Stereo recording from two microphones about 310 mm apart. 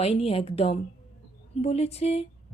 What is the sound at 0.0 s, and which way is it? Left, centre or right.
Speech, centre.